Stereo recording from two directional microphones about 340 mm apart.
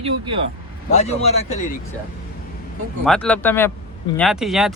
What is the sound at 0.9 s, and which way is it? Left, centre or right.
Speech, centre.